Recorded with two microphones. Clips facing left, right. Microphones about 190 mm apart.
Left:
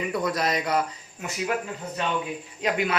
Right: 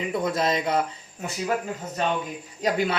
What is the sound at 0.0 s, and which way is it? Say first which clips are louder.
Speech: right 1 dB; 25° right (ahead or behind).